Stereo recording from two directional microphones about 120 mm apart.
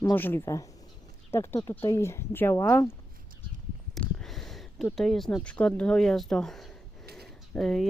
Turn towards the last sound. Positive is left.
turn(degrees=5)  # may be behind; listen again after turning